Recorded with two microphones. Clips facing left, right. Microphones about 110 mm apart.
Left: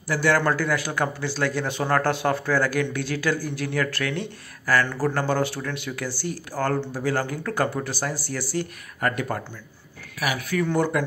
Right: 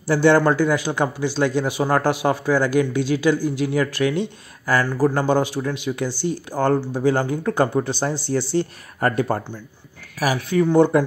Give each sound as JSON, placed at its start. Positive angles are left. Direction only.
{"t": 0.0, "sound": "speech", "side_deg": -25}
{"t": 10.5, "sound": "speech", "side_deg": -20}